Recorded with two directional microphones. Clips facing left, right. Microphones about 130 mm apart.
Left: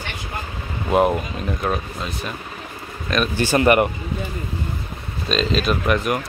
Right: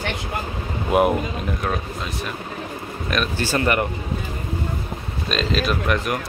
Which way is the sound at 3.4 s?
15° left (ahead or behind).